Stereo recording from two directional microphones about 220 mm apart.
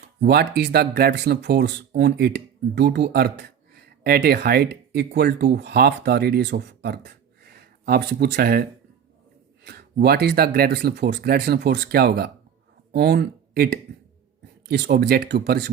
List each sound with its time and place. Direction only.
0.2 s speech: 45° right (ahead or behind)
9.6 s speech: 45° right (ahead or behind)